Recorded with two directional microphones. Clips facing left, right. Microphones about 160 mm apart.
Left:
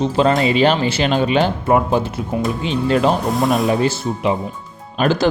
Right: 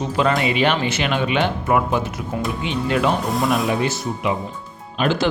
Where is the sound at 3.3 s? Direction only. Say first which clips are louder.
Left 3 dB; centre (ahead or behind).